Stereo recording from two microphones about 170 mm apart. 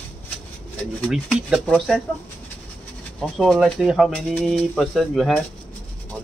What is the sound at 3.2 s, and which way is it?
Speech, centre (ahead or behind).